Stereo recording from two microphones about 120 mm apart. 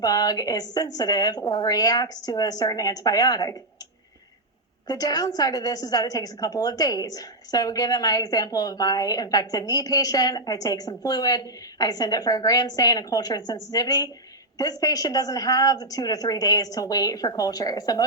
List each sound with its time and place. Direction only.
0.0 s a woman's voice: 30° left (ahead or behind)
4.9 s a woman's voice: 30° left (ahead or behind)